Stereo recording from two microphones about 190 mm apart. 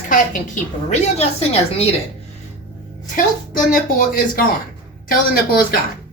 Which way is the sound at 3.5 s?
50° left (ahead or behind).